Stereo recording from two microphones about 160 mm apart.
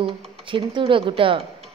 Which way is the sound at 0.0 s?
35° right (ahead or behind).